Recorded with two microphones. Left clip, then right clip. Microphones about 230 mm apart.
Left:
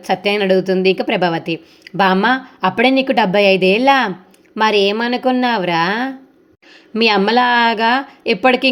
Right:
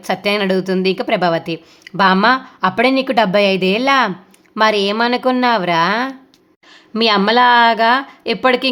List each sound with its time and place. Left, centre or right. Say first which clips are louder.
0.0 s a woman's voice: left 1 dB; centre